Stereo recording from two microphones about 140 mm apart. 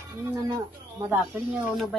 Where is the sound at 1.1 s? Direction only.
15° right (ahead or behind).